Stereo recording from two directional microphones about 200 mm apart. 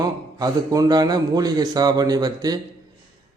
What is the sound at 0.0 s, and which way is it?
A man's voice, 15° right (ahead or behind).